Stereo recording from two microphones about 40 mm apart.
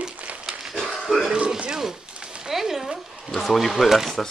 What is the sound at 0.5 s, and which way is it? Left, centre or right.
Dog, centre.